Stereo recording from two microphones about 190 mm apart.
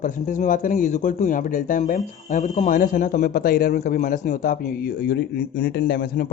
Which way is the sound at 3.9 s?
40° left (ahead or behind).